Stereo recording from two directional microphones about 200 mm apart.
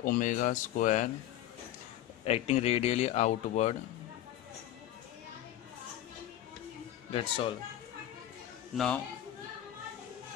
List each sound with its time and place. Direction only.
0.0 s speech: 45° left (ahead or behind)
2.2 s speech: 30° left (ahead or behind)
7.1 s speech: 30° left (ahead or behind)
8.7 s a man's voice: 5° left (ahead or behind)